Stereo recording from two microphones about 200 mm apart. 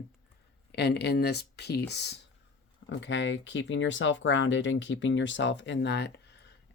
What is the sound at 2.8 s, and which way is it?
A woman's voice, 65° left (ahead or behind).